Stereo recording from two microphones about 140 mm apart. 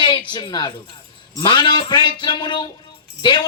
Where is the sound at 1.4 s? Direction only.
30° left (ahead or behind).